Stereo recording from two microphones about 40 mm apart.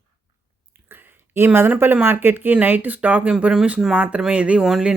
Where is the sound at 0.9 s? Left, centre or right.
Right.